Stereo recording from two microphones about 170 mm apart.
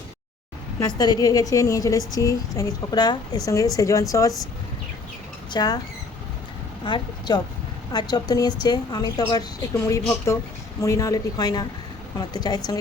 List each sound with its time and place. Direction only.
0.8 s a woman's voice: 25° left (ahead or behind)
5.5 s speech: 25° left (ahead or behind)
6.8 s a woman's voice: 25° left (ahead or behind)